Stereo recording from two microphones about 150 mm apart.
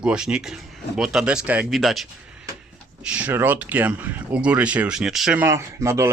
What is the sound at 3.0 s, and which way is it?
Speech, 10° right (ahead or behind).